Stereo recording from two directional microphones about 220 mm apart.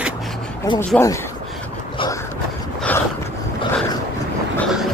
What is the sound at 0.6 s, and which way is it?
Speech, 10° left (ahead or behind).